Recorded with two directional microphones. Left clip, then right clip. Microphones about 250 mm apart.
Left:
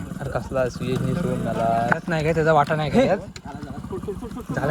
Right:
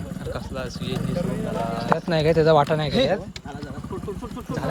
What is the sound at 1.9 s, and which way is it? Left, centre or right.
Speech, centre.